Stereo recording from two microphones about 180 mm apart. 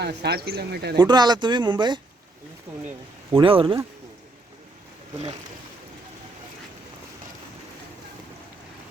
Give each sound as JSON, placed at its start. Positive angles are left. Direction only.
{"t": 0.0, "sound": "speech", "side_deg": -65}
{"t": 0.9, "sound": "speech", "side_deg": -25}
{"t": 3.4, "sound": "speech", "side_deg": -30}